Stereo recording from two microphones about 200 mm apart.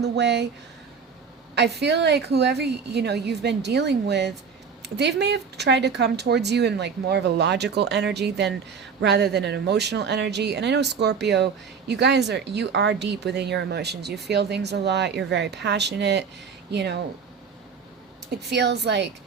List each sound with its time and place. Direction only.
0.0 s speech: 60° right (ahead or behind)
1.5 s speech: 55° right (ahead or behind)
18.3 s speech: 55° right (ahead or behind)